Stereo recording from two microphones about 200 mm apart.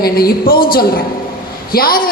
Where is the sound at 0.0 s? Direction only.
50° left (ahead or behind).